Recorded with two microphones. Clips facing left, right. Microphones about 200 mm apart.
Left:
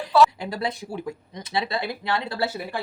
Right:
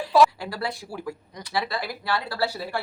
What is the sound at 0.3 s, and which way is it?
Speech, 20° left (ahead or behind).